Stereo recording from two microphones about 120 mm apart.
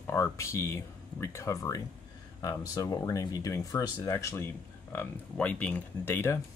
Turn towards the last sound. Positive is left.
turn(degrees=20)  # may be behind; listen again after turning